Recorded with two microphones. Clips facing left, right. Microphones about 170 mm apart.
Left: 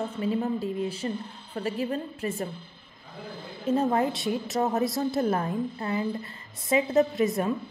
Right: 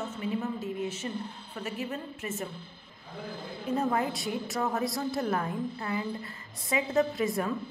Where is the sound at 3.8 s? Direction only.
25° left (ahead or behind).